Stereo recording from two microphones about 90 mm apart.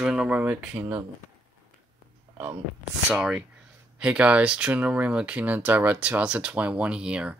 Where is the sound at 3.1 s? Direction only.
5° right (ahead or behind).